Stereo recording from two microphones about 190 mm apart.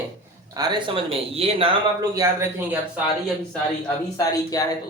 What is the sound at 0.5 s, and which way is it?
Speech, 20° right (ahead or behind).